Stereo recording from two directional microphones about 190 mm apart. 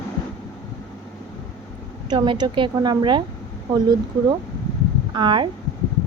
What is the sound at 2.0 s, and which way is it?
A woman's voice, 25° right (ahead or behind).